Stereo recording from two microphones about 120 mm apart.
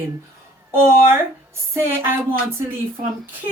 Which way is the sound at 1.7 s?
20° right (ahead or behind).